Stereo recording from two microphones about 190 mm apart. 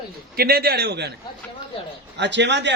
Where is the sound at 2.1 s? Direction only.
65° right (ahead or behind).